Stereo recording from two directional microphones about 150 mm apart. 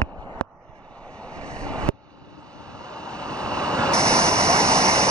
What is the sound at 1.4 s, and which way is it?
Vehicle, 5° left (ahead or behind).